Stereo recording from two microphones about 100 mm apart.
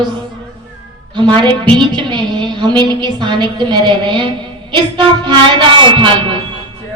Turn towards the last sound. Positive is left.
turn(degrees=-55)  # may be behind; listen again after turning